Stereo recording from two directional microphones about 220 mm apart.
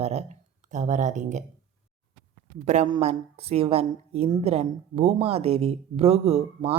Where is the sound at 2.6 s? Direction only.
30° right (ahead or behind).